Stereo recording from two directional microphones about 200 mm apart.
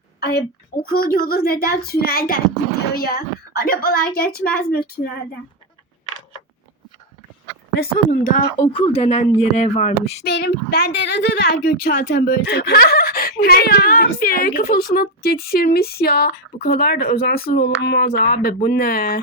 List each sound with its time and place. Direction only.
0.2 s a woman's voice: 55° left (ahead or behind)
7.8 s a woman's voice: 40° left (ahead or behind)
8.6 s speech: 30° left (ahead or behind)
10.2 s a woman's voice: 55° left (ahead or behind)